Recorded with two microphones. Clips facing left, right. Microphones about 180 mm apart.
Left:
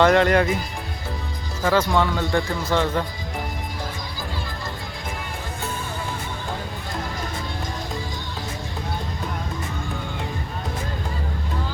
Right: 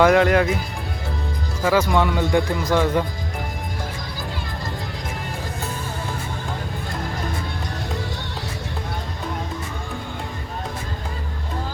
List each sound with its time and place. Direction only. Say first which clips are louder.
0.0 s speech: right 1 dB; 5° right (ahead or behind)
1.6 s speech: right 1 dB; 5° right (ahead or behind)